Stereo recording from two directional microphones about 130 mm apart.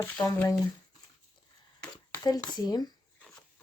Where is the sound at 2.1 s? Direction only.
30° left (ahead or behind).